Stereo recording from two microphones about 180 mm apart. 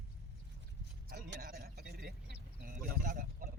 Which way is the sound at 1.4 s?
55° right (ahead or behind).